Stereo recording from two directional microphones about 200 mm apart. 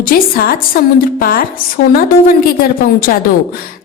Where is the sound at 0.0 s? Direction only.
50° left (ahead or behind).